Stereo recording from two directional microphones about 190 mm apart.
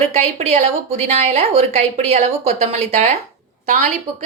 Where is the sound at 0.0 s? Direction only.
35° right (ahead or behind).